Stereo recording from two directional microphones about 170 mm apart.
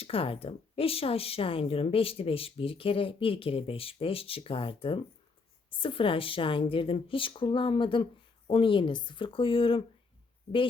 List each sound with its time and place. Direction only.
0.0 s speech: 35° left (ahead or behind)